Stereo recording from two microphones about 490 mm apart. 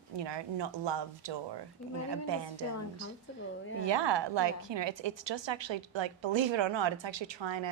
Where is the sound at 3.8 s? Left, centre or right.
Right.